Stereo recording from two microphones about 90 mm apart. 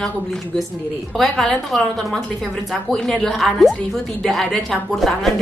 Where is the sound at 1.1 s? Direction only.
5° left (ahead or behind).